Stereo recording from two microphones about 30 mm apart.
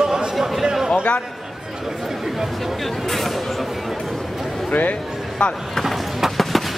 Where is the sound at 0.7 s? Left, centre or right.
Centre.